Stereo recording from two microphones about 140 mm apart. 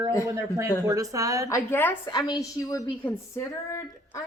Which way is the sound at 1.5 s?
15° left (ahead or behind).